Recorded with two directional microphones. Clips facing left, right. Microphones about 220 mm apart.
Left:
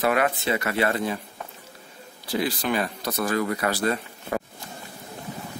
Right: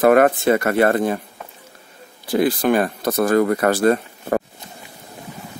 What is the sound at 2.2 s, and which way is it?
Speech, 50° right (ahead or behind).